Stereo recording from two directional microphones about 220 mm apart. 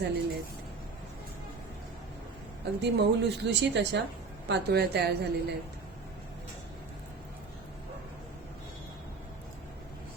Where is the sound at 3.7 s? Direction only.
50° right (ahead or behind).